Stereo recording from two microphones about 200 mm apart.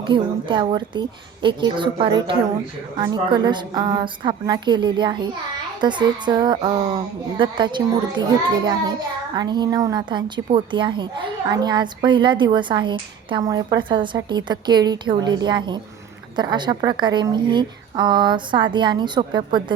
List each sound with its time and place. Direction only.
0.1 s a woman's voice: 25° right (ahead or behind)